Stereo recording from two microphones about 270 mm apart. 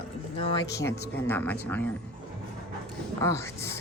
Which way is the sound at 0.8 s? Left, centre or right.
Centre.